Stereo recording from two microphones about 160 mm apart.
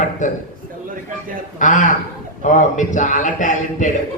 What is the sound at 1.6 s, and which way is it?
A man's voice, 50° left (ahead or behind).